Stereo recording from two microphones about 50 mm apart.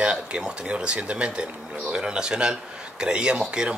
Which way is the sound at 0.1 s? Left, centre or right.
Centre.